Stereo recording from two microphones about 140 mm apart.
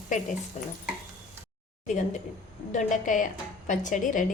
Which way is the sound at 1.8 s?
55° left (ahead or behind).